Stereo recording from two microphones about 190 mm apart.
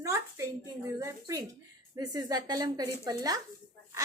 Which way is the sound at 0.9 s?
15° right (ahead or behind).